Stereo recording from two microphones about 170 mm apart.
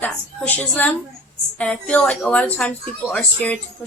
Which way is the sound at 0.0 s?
10° left (ahead or behind).